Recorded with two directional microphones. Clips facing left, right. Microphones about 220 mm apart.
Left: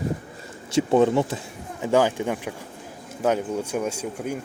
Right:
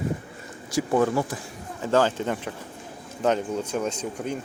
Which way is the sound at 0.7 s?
25° left (ahead or behind).